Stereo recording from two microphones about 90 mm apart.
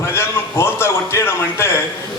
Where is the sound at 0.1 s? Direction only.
25° left (ahead or behind).